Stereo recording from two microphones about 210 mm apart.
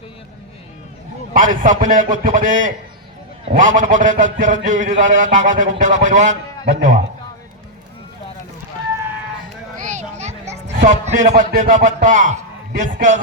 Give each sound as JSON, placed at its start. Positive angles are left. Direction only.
{"t": 1.3, "sound": "a man's voice", "side_deg": -40}
{"t": 9.7, "sound": "children playing", "side_deg": -35}
{"t": 12.0, "sound": "a man's voice", "side_deg": -35}